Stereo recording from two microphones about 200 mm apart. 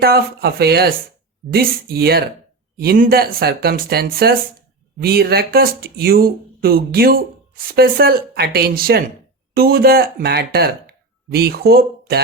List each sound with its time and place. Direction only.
0.0 s speech: 50° right (ahead or behind)